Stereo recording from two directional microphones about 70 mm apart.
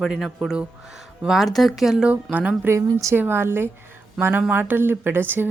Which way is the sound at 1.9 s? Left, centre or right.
Centre.